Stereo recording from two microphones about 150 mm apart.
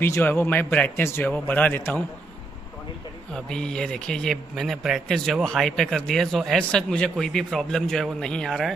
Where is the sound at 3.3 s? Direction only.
5° left (ahead or behind).